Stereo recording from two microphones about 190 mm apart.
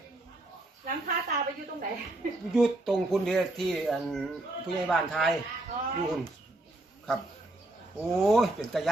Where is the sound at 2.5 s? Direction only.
Centre (ahead or behind).